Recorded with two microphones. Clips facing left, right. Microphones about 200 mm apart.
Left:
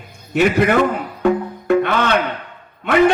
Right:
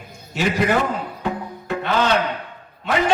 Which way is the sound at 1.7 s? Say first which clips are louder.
Left 5 dB; 55° left (ahead or behind).